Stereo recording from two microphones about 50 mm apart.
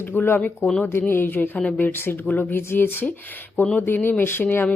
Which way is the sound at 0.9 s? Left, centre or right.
Left.